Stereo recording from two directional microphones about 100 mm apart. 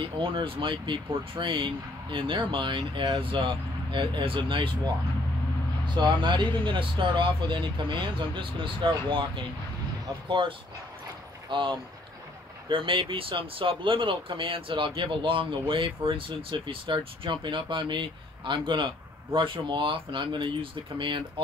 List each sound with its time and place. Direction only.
0.0 s speech: 60° right (ahead or behind)
5.9 s speech: 50° right (ahead or behind)
11.5 s speech: 55° right (ahead or behind)